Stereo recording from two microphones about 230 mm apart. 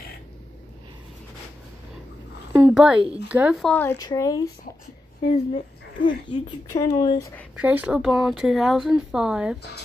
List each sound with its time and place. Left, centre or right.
2.5 s speech: centre
6.0 s speech: centre
7.5 s speech: centre